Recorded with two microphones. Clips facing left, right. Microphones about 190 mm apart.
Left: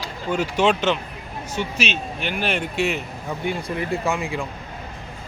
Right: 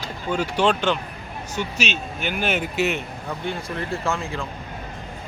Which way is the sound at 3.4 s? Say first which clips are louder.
Left 4 dB; 15° left (ahead or behind).